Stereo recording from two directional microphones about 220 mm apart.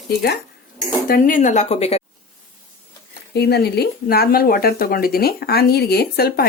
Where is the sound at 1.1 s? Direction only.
35° left (ahead or behind).